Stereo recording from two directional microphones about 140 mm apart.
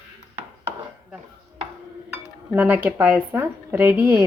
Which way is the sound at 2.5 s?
15° right (ahead or behind).